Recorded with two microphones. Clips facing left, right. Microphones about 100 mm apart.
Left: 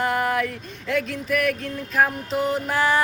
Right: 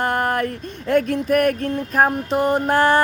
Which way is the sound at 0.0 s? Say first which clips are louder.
Right 2 dB; 50° right (ahead or behind).